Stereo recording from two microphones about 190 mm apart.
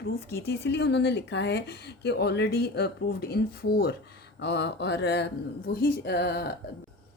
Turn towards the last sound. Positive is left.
turn(degrees=60)  # may be behind; listen again after turning